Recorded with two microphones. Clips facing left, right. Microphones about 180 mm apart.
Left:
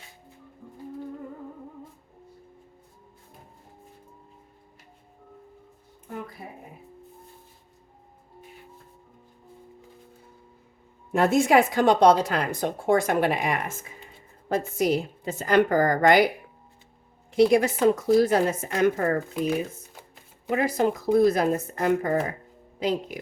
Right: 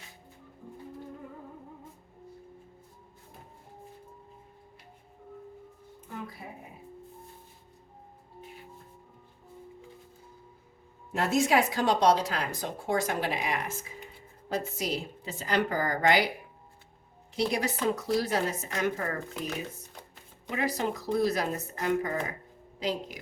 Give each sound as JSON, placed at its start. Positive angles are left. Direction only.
{"t": 11.1, "sound": "speech", "side_deg": 55}
{"t": 17.3, "sound": "speech", "side_deg": 50}
{"t": 20.5, "sound": "speech", "side_deg": 50}